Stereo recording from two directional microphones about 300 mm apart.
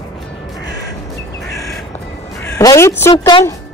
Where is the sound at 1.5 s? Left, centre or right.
Centre.